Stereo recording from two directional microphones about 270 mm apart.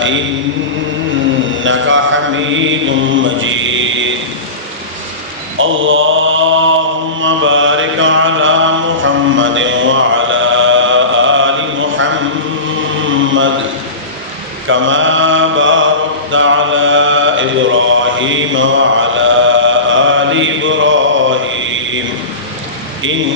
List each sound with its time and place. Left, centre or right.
0.0 s mantra: right
1.5 s mantra: right
5.5 s mantra: right
13.1 s mantra: right
14.7 s mantra: right